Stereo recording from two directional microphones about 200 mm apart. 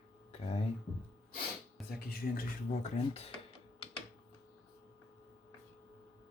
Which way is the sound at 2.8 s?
30° left (ahead or behind).